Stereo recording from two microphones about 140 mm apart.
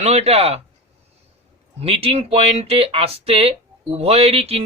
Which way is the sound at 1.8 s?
45° right (ahead or behind).